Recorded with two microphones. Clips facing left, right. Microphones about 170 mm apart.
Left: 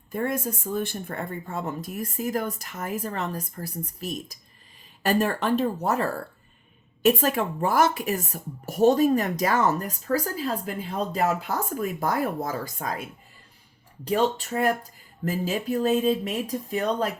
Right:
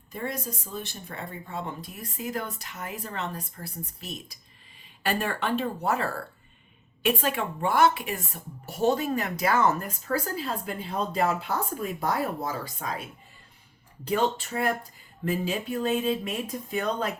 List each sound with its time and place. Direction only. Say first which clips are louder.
0.1 s speech: left 6 dB; 50° left (ahead or behind)
5.0 s speech: left 5 dB; 40° left (ahead or behind)
14.1 s speech: left 2 dB; 40° left (ahead or behind)